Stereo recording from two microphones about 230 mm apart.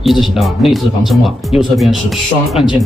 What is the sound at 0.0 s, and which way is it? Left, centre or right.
Speech, centre.